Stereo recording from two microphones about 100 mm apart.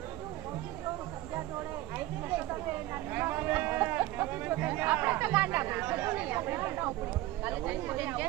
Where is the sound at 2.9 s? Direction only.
20° right (ahead or behind).